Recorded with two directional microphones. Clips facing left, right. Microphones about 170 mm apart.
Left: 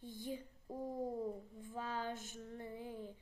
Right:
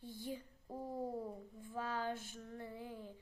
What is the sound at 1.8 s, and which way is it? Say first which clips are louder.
Child singing: right 2 dB; 45° right (ahead or behind).